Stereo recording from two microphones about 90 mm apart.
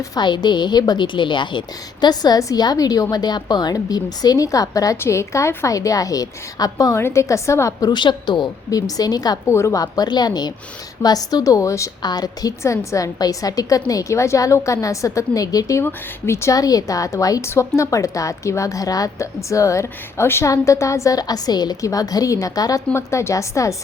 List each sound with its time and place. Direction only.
0.2 s a woman's voice: 55° left (ahead or behind)
6.9 s a woman's voice: 30° left (ahead or behind)
7.9 s a woman's voice: 60° left (ahead or behind)
8.7 s a woman's voice: 45° left (ahead or behind)
9.5 s a woman's voice: 30° left (ahead or behind)
12.0 s a woman's voice: 45° left (ahead or behind)
15.8 s a woman's voice: 25° left (ahead or behind); by 22.8 s 40° left (ahead or behind)
22.9 s a woman's voice: 30° left (ahead or behind)